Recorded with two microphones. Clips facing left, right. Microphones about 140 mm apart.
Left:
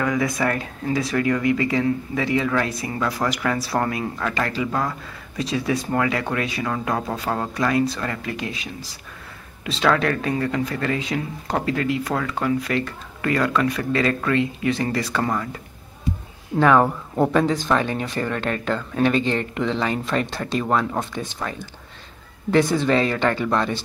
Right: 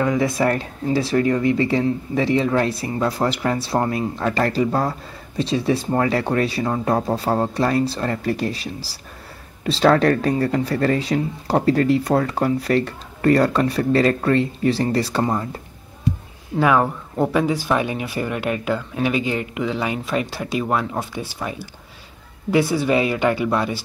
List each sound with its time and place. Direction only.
0.0 s speech: 25° right (ahead or behind)
4.2 s speech: 35° right (ahead or behind)
16.5 s speech: 5° right (ahead or behind)